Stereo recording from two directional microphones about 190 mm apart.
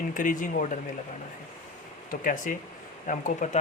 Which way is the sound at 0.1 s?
45° left (ahead or behind).